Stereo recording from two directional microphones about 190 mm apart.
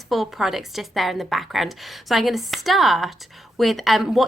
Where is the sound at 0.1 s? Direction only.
Centre (ahead or behind).